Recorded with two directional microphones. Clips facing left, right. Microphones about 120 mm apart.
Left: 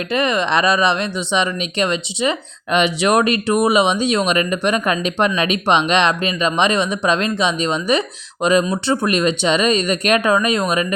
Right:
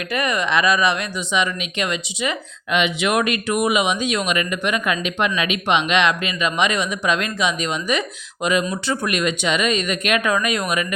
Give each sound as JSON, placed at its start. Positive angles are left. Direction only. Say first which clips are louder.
{"t": 0.1, "sound": "speech", "louder": "left 3 dB", "side_deg": 25}